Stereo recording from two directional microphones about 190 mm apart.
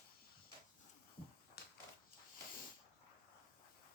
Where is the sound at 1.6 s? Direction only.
60° left (ahead or behind).